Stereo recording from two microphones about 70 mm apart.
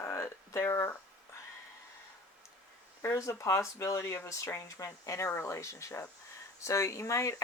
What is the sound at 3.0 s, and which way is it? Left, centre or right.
Speech, left.